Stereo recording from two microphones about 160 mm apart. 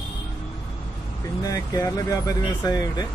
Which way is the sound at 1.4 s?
20° left (ahead or behind).